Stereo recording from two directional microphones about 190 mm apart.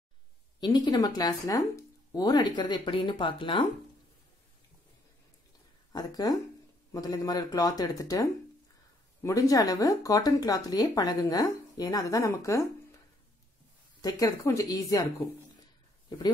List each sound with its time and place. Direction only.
0.6 s speech: 20° left (ahead or behind)
5.9 s speech: 20° left (ahead or behind)
14.0 s speech: 15° left (ahead or behind)